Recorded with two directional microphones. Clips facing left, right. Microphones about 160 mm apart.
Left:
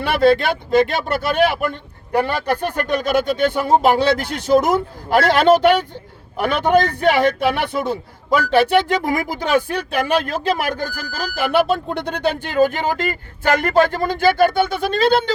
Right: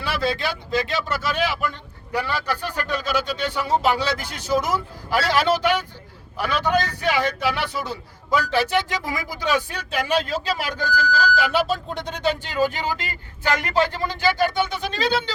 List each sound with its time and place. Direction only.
0.0 s a man's voice: 55° left (ahead or behind)